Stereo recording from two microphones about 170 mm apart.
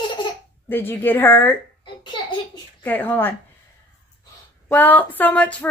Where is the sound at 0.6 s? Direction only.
10° left (ahead or behind).